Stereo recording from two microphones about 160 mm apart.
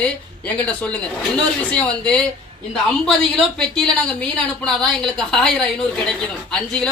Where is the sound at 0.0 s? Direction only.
10° left (ahead or behind).